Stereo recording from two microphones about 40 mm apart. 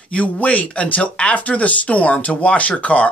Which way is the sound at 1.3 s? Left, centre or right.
Left.